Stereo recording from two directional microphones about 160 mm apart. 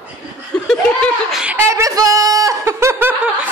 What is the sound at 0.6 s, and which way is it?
Chuckle, centre (ahead or behind).